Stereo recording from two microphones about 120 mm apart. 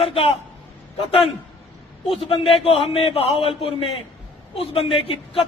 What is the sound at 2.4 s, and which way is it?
A man's voice, 55° left (ahead or behind).